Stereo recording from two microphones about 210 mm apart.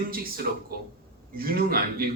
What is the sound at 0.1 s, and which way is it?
Speech, 45° right (ahead or behind).